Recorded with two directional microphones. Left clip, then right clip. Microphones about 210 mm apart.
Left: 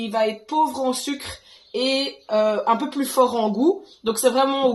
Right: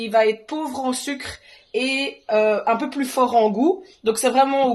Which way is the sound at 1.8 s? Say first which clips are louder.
Left 1 dB; 40° right (ahead or behind).